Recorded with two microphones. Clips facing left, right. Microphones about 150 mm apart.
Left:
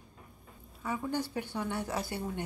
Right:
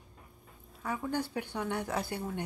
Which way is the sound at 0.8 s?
5° left (ahead or behind).